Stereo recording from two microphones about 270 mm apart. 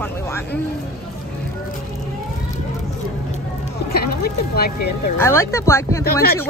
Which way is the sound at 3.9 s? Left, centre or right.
Left.